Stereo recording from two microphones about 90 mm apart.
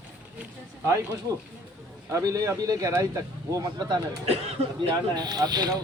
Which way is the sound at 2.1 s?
40° right (ahead or behind).